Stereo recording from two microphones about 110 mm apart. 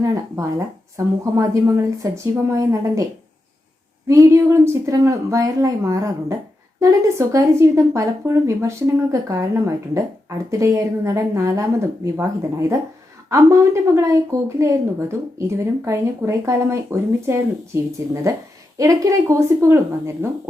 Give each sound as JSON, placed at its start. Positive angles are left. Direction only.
{"t": 0.0, "sound": "a woman's voice", "side_deg": -30}
{"t": 4.1, "sound": "a woman's voice", "side_deg": -25}